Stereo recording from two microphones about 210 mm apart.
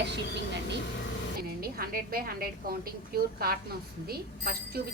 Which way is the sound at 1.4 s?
45° right (ahead or behind).